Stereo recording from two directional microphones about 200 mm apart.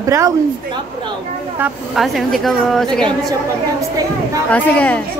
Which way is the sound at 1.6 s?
Centre (ahead or behind).